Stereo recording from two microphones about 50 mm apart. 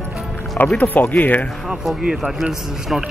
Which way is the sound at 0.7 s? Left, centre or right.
Left.